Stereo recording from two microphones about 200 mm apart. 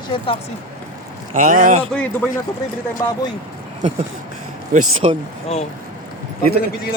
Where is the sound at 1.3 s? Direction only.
40° right (ahead or behind).